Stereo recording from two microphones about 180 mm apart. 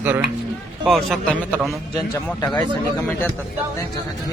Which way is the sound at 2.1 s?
10° left (ahead or behind).